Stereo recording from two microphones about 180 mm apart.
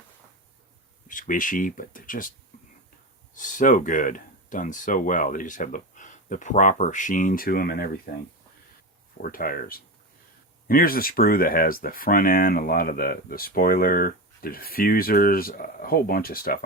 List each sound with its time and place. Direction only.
1.0 s speech: 50° left (ahead or behind)
3.3 s speech: 45° left (ahead or behind)
9.2 s speech: 50° left (ahead or behind)